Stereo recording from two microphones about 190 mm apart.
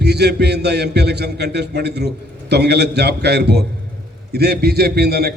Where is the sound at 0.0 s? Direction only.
60° right (ahead or behind).